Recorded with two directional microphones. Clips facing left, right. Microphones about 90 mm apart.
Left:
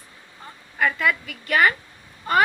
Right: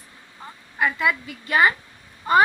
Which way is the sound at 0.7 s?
20° right (ahead or behind).